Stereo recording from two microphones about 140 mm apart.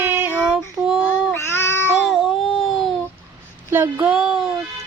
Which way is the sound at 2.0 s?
Centre (ahead or behind).